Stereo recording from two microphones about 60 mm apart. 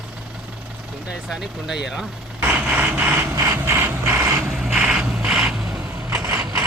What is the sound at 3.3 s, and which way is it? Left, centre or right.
Vehicle, right.